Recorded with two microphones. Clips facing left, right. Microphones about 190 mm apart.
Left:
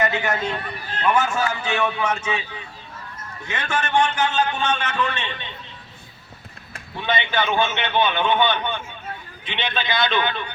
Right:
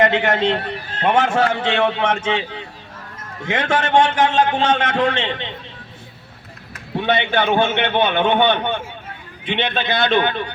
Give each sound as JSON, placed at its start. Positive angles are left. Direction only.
{"t": 0.0, "sound": "a man's voice", "side_deg": -60}
{"t": 3.4, "sound": "a man's voice", "side_deg": -90}
{"t": 6.9, "sound": "a man's voice", "side_deg": -60}